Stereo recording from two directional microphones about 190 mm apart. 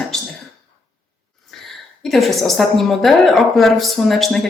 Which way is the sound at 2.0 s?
Centre (ahead or behind).